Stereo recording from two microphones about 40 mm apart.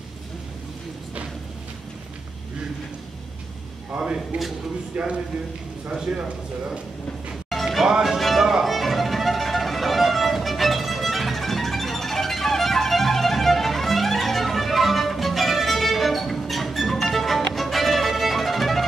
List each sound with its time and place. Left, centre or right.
3.9 s speech: centre
4.9 s speech: right
6.1 s speech: right
7.4 s music: centre